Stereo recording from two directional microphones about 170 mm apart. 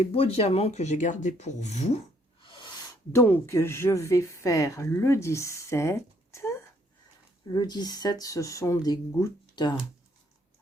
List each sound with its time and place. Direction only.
0.0 s speech: 35° left (ahead or behind)
2.4 s a sound: 30° left (ahead or behind)
3.1 s speech: 15° left (ahead or behind)
7.5 s speech: 25° left (ahead or behind)